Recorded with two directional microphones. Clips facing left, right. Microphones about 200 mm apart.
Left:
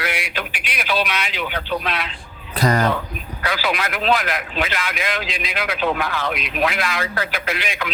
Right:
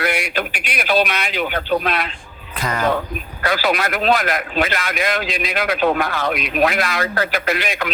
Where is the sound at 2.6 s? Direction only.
35° left (ahead or behind).